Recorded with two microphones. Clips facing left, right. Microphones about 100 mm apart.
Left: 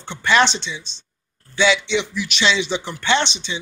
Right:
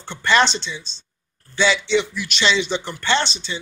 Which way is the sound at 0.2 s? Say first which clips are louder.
Left 1 dB; 10° left (ahead or behind).